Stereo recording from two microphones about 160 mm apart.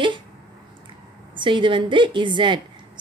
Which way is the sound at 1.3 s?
30° right (ahead or behind).